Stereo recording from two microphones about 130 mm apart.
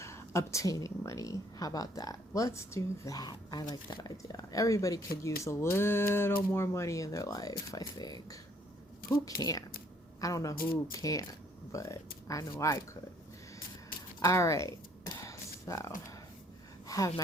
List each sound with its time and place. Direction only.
0.0 s speech: 20° left (ahead or behind)
14.2 s a sound: 25° left (ahead or behind)
16.8 s gasp: 25° left (ahead or behind)